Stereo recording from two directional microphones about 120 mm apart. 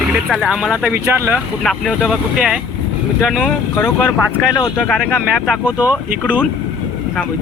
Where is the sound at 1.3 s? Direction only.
Centre (ahead or behind).